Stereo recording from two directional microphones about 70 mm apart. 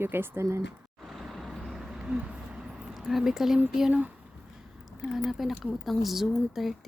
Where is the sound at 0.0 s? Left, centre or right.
Right.